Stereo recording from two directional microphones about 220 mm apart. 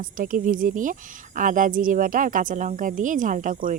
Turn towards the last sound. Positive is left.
turn(degrees=-35)  # may be behind; listen again after turning